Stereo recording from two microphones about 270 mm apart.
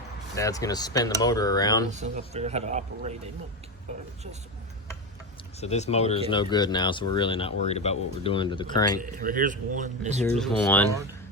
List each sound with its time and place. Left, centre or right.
0.3 s speech: centre
1.9 s a man's voice: right
5.5 s speech: left
9.0 s a man's voice: right
10.2 s speech: centre